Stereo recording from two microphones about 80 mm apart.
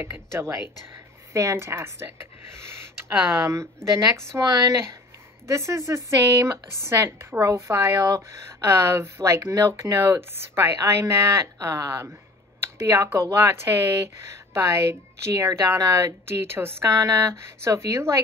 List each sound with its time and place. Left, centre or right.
0.0 s speech: right
2.0 s music: right
4.1 s speech: right
7.4 s speech: right
9.9 s speech: right
16.9 s speech: right